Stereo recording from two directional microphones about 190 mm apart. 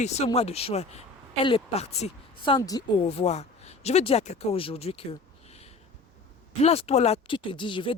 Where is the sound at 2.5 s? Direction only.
20° left (ahead or behind).